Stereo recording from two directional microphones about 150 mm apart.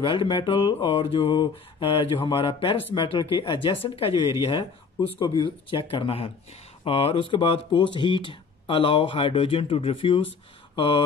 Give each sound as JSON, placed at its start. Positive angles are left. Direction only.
{"t": 0.0, "sound": "speech", "side_deg": 35}
{"t": 5.2, "sound": "speech", "side_deg": 30}